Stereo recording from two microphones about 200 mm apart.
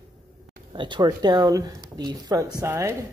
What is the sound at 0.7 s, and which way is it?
A man's voice, 20° right (ahead or behind).